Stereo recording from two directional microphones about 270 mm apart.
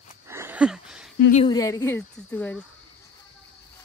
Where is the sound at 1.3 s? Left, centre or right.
Left.